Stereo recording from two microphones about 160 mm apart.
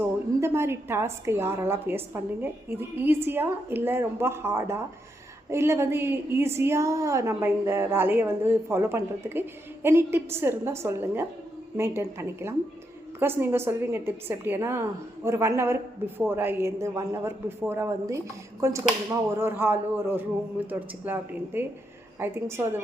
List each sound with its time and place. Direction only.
0.3 s a woman's voice: 15° right (ahead or behind)